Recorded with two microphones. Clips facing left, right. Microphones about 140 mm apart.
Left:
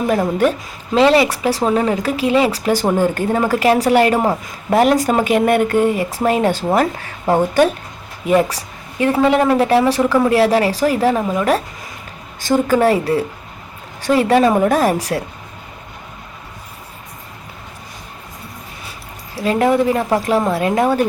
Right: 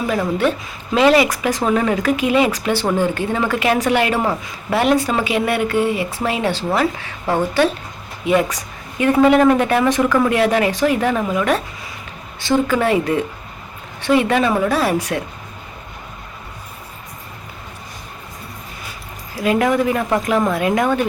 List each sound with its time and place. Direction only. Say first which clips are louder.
0.1 s speech: left 3 dB; 40° left (ahead or behind)
0.9 s speech: left 1 dB; 30° left (ahead or behind)
19.4 s speech: left 2 dB; 30° left (ahead or behind)